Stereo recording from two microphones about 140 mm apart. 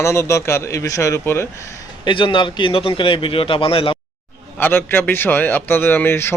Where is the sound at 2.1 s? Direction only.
35° left (ahead or behind).